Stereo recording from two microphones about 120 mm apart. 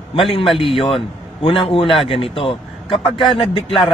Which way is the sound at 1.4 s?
50° left (ahead or behind).